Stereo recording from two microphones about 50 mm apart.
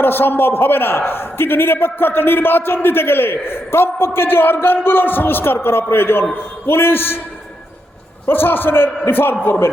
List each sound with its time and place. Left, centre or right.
0.0 s a man's voice: left
8.3 s a man's voice: left